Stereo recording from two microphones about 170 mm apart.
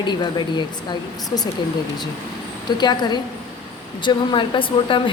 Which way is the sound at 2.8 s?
25° left (ahead or behind).